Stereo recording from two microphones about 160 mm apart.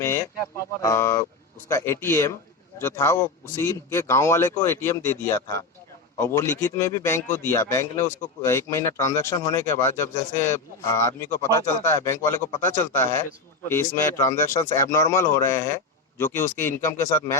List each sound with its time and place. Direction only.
0.0 s speech: 20° left (ahead or behind)